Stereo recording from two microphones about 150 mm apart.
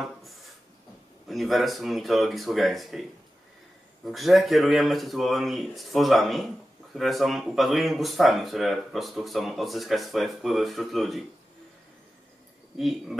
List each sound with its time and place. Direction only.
1.3 s speech: centre (ahead or behind)
12.7 s speech: centre (ahead or behind)